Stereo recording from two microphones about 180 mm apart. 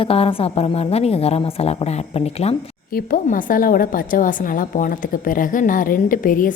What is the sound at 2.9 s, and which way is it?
A woman's voice, 50° left (ahead or behind).